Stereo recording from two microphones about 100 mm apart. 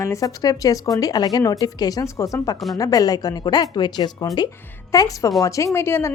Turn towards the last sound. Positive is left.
turn(degrees=25)  # may be behind; listen again after turning